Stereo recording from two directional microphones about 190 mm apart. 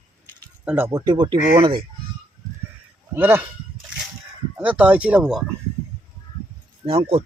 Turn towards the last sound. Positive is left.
turn(degrees=-30)  # may be behind; listen again after turning